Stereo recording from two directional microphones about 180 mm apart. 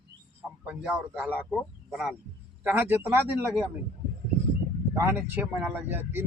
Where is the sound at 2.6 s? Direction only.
10° right (ahead or behind).